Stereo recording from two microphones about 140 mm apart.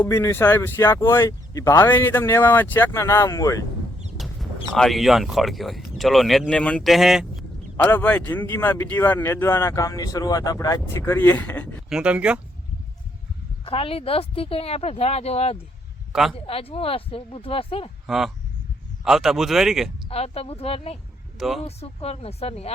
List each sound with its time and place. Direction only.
0.0 s speech: 15° left (ahead or behind)
4.2 s a sound: centre (ahead or behind)
4.7 s speech: centre (ahead or behind)
7.9 s speech: 10° left (ahead or behind)
11.9 s speech: 5° right (ahead or behind)
13.7 s speech: 40° left (ahead or behind)
16.1 s speech: centre (ahead or behind)
16.5 s speech: 45° left (ahead or behind)
18.0 s speech: centre (ahead or behind)
20.1 s speech: 45° left (ahead or behind)
21.3 s speech: centre (ahead or behind)
21.8 s speech: 50° left (ahead or behind)